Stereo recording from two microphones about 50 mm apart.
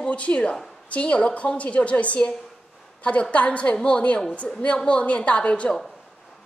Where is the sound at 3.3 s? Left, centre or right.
Left.